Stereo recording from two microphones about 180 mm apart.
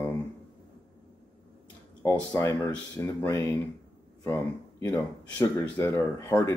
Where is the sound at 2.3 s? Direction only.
15° left (ahead or behind).